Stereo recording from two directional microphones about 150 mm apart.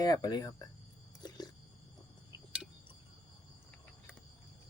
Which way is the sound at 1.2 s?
25° left (ahead or behind).